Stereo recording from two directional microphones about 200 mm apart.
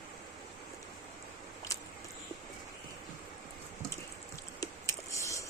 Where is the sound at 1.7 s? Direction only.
15° left (ahead or behind).